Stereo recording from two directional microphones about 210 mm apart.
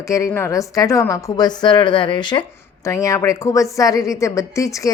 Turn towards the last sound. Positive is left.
turn(degrees=15)  # may be behind; listen again after turning